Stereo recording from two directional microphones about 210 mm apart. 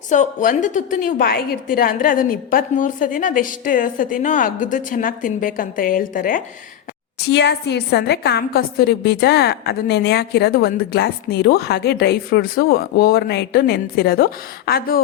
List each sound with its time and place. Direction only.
0.1 s a woman's voice: 35° left (ahead or behind)
7.2 s a woman's voice: 50° left (ahead or behind)